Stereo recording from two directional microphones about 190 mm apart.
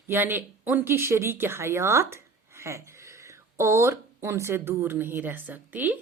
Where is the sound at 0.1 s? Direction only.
10° right (ahead or behind).